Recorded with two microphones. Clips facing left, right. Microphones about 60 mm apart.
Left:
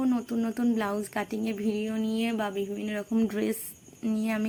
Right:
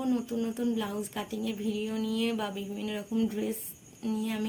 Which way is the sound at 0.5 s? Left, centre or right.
Left.